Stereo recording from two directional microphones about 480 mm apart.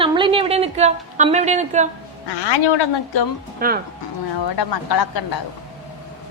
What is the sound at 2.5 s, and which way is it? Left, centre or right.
Speech, left.